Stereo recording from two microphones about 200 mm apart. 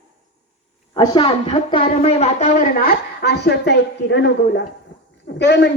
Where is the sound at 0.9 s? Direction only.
20° left (ahead or behind).